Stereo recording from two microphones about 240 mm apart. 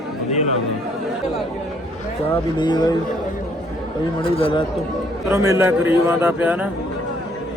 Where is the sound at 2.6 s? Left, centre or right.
Centre.